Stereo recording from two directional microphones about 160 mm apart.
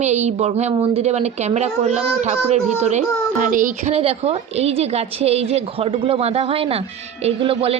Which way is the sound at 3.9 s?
40° right (ahead or behind).